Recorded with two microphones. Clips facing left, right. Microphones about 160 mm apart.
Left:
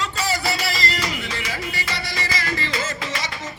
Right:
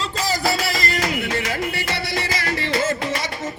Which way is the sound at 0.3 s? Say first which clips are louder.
Right 5 dB; 45° right (ahead or behind).